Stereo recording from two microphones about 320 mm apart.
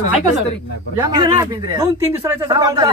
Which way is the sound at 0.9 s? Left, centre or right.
Centre.